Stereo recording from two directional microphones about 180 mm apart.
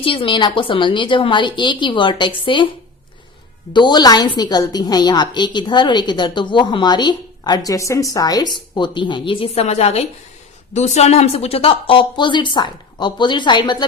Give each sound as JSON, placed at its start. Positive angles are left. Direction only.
{"t": 0.0, "sound": "a woman's voice", "side_deg": 30}
{"t": 3.7, "sound": "a woman's voice", "side_deg": 25}